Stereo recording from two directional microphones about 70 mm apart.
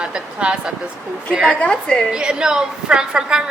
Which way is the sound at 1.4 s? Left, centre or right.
Centre.